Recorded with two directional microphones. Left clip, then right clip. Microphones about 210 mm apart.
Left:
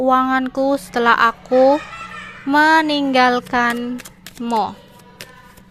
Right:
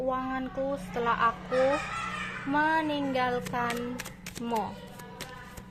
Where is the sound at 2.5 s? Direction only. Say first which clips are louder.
Left 14 dB; 45° left (ahead or behind).